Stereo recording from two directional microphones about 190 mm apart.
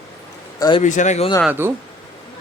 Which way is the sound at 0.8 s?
40° left (ahead or behind).